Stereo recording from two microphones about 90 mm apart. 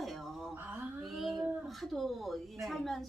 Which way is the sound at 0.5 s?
20° right (ahead or behind).